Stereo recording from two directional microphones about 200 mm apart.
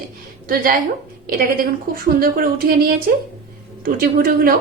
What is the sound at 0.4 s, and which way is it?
A woman's voice, 45° right (ahead or behind).